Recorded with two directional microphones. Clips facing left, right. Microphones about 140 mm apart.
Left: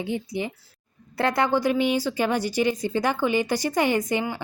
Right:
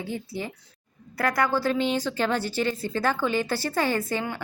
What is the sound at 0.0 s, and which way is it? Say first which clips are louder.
A woman's voice: left 4 dB; 20° left (ahead or behind).